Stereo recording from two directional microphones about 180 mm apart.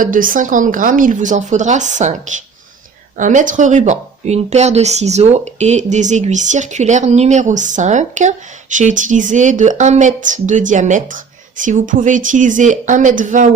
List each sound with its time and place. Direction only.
0.0 s speech: 50° right (ahead or behind)